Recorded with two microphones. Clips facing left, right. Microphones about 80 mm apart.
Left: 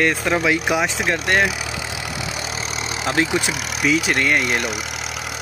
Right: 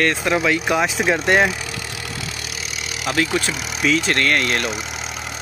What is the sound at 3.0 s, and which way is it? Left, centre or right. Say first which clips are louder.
Speech: even; left.